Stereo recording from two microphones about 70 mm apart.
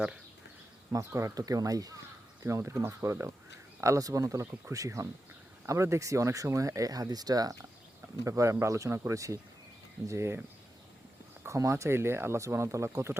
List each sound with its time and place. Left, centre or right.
0.9 s speech: right
2.4 s speech: right
8.2 s speech: right
10.1 s speech: right
11.4 s speech: right